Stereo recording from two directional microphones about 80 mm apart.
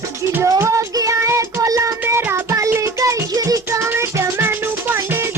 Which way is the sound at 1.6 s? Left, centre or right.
Right.